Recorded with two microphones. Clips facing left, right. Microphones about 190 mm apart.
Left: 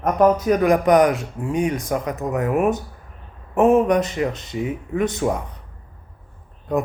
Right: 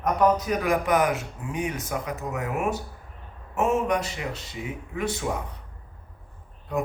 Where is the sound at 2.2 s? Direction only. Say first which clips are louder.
Left 10 dB; 55° left (ahead or behind).